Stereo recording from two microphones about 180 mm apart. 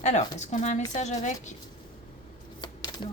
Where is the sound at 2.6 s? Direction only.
25° left (ahead or behind).